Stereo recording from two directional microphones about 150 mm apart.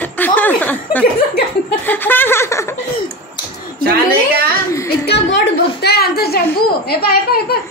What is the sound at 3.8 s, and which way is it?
Speech, 90° right.